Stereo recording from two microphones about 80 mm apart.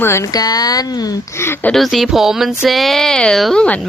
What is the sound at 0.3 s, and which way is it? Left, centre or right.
Speech, left.